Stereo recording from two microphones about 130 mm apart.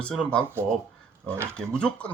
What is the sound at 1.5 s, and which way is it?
Speech, 5° left (ahead or behind).